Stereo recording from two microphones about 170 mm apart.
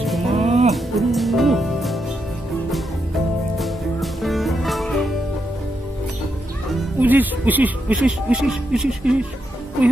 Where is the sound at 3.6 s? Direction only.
Centre (ahead or behind).